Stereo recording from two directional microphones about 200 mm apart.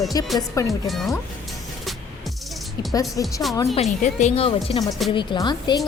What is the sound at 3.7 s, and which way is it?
Speech, 35° left (ahead or behind).